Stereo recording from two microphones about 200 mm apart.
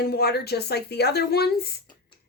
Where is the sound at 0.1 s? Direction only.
55° left (ahead or behind).